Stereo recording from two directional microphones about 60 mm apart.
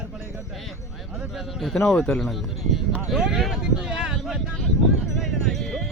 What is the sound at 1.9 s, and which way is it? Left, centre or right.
Speech, centre.